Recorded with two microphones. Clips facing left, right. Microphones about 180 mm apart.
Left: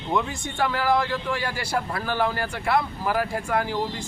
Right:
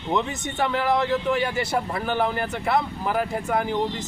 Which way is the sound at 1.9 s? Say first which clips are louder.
Right 2 dB; 15° right (ahead or behind).